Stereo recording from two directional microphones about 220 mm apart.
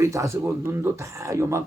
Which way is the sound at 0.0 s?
15° right (ahead or behind).